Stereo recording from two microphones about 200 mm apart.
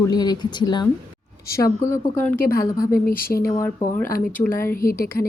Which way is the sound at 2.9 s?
45° left (ahead or behind).